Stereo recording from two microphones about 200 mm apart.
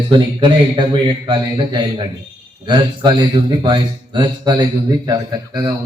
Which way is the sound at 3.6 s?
25° right (ahead or behind).